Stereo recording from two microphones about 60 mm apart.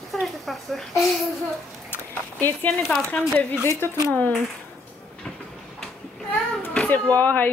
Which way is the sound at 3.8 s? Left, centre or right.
Left.